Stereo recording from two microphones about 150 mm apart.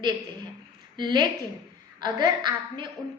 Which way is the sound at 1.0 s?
30° right (ahead or behind).